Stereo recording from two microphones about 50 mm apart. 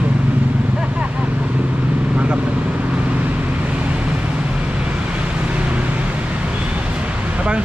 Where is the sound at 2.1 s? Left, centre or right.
Right.